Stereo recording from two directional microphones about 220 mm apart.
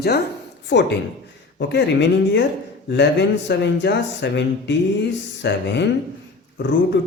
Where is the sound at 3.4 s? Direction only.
50° left (ahead or behind).